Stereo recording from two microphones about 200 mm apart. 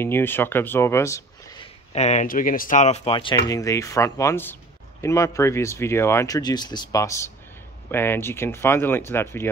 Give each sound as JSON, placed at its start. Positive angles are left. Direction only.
{"t": 0.0, "sound": "speech", "side_deg": 10}
{"t": 1.9, "sound": "speech", "side_deg": 35}